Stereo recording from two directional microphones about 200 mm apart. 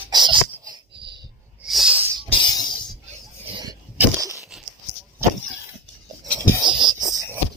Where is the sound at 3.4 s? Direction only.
20° right (ahead or behind).